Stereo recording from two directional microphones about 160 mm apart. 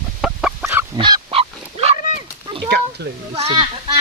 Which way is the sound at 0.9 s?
30° right (ahead or behind).